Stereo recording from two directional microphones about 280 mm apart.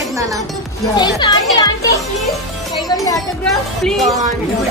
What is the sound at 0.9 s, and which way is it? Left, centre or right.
Speech, centre.